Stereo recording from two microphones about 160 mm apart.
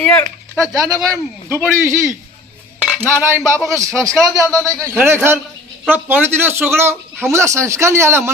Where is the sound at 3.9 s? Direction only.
5° left (ahead or behind).